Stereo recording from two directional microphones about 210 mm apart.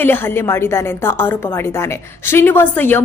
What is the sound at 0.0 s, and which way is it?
A woman's voice, 10° left (ahead or behind).